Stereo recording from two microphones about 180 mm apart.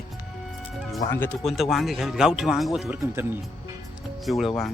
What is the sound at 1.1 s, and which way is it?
Speech, 10° left (ahead or behind).